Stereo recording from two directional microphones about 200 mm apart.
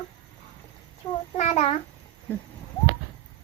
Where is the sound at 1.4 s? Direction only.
35° left (ahead or behind).